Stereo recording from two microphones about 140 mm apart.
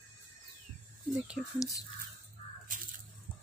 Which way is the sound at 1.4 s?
25° left (ahead or behind).